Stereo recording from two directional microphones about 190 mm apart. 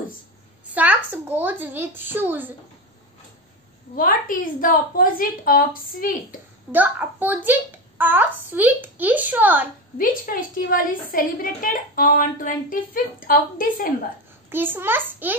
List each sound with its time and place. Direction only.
0.7 s a child's voice: 10° right (ahead or behind)
3.9 s a woman's voice: 45° left (ahead or behind)
6.7 s a child's voice: 10° right (ahead or behind)
9.9 s a woman's voice: 45° left (ahead or behind)
14.5 s a child's voice: 10° right (ahead or behind)